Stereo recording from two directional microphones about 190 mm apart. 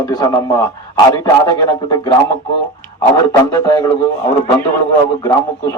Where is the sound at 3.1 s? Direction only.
20° left (ahead or behind).